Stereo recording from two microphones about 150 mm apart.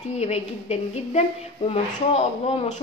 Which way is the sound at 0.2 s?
45° left (ahead or behind).